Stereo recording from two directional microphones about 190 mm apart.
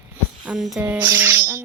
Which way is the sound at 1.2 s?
10° right (ahead or behind).